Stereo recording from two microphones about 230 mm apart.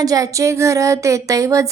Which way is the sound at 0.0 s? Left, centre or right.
Centre.